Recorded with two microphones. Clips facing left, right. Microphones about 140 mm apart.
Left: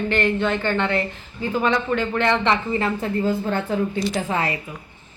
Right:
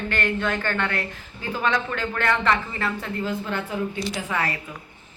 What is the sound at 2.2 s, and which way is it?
A woman's voice, 25° left (ahead or behind).